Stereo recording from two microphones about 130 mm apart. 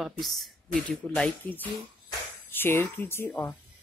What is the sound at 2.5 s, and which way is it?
Speech, 15° left (ahead or behind).